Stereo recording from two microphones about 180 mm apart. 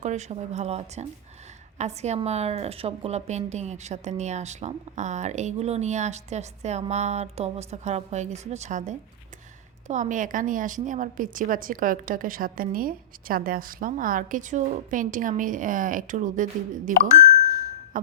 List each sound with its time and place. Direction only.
0.0 s a woman's voice: 40° right (ahead or behind)
17.9 s music: 50° right (ahead or behind)